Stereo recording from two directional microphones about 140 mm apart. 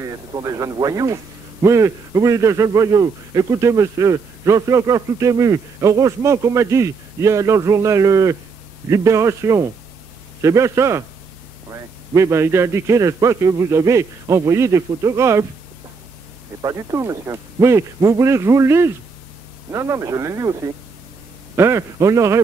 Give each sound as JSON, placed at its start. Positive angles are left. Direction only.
{"t": 0.0, "sound": "speech", "side_deg": -25}
{"t": 16.6, "sound": "speech", "side_deg": -20}